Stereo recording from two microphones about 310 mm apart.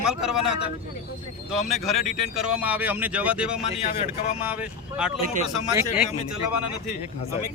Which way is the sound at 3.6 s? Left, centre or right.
Centre.